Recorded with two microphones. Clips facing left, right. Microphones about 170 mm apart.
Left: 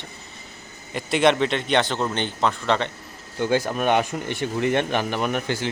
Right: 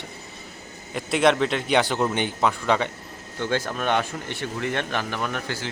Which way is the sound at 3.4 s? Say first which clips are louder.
Left 4 dB; 10° left (ahead or behind).